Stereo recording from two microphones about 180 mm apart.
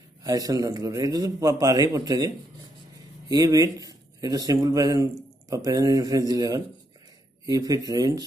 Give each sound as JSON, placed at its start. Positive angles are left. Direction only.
{"t": 0.2, "sound": "speech", "side_deg": -20}